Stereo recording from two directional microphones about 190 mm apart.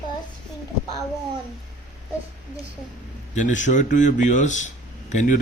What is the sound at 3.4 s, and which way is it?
Speech, 40° left (ahead or behind).